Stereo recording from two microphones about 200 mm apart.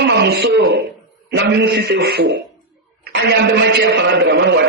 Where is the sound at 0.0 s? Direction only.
55° right (ahead or behind).